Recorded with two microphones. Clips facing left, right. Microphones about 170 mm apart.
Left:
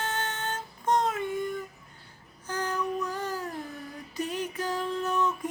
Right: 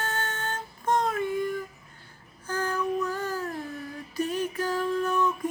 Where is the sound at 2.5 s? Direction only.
20° left (ahead or behind).